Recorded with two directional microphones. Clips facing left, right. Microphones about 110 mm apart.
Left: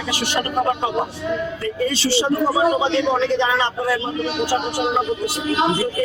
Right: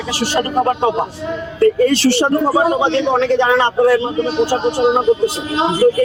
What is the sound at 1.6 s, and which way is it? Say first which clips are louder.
A man's voice: right 14 dB; 65° right (ahead or behind).